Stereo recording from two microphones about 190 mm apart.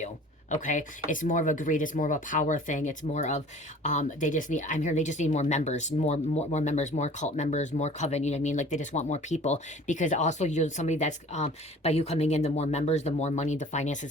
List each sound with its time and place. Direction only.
0.5 s speech: 40° left (ahead or behind)